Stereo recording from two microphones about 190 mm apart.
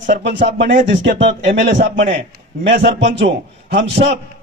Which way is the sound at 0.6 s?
60° right (ahead or behind).